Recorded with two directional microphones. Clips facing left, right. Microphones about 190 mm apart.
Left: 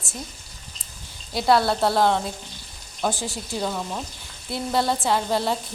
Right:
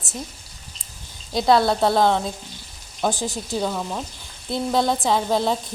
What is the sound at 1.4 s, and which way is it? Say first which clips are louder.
Speech: right 2 dB; 5° left (ahead or behind).